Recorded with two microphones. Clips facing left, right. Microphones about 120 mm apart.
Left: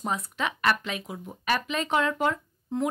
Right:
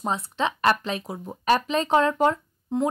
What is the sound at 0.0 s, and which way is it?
Speech, 30° right (ahead or behind).